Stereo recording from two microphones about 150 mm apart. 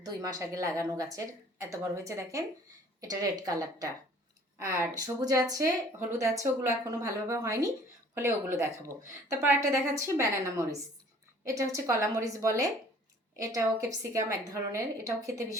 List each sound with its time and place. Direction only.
0.0 s speech: 25° right (ahead or behind)